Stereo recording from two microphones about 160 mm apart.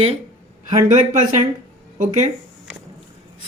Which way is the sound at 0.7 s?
50° right (ahead or behind).